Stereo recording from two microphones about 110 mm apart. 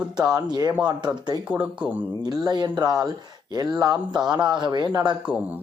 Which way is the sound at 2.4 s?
40° right (ahead or behind).